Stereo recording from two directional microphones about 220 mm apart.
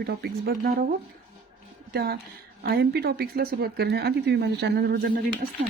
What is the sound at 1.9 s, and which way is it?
Speech, 45° right (ahead or behind).